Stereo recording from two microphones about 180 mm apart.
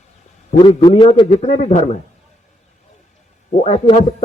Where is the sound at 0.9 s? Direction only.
30° left (ahead or behind).